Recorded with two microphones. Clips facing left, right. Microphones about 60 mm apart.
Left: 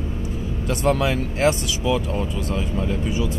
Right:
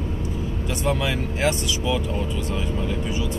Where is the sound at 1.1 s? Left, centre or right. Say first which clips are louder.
Left 3 dB; centre.